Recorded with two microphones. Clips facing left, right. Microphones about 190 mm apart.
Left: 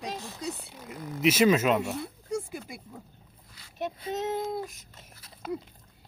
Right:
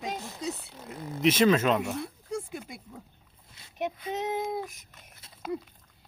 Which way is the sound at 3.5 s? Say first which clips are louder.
Right 1 dB; 20° right (ahead or behind).